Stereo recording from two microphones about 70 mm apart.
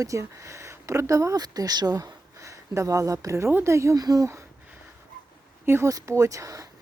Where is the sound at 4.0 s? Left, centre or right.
Right.